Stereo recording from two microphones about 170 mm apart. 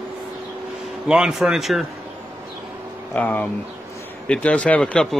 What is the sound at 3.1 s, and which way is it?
Speech, 10° left (ahead or behind).